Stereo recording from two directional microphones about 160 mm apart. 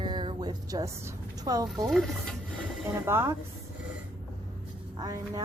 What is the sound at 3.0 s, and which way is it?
Speech, 15° right (ahead or behind).